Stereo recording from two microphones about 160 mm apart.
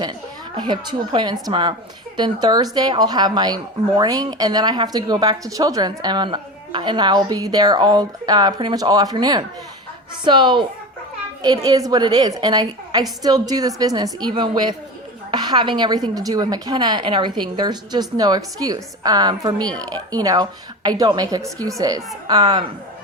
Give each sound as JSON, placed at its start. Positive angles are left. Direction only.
{"t": 0.5, "sound": "speech", "side_deg": -30}